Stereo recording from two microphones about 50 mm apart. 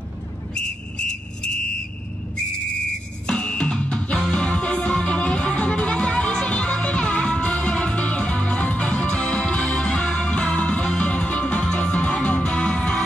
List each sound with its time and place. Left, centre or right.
0.9 s whistle: centre
3.3 s music: centre